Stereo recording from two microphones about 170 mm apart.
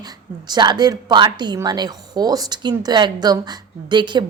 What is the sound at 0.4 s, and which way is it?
A woman's voice, 25° right (ahead or behind).